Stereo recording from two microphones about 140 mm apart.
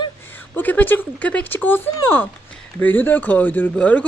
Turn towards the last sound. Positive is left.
turn(degrees=10)  # may be behind; listen again after turning